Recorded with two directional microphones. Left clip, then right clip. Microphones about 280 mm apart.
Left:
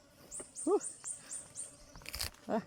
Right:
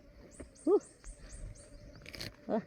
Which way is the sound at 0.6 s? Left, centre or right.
Left.